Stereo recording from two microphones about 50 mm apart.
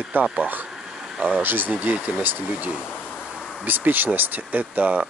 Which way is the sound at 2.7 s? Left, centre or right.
Centre.